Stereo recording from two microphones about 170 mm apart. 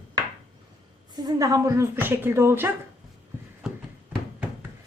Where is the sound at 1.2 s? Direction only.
20° right (ahead or behind).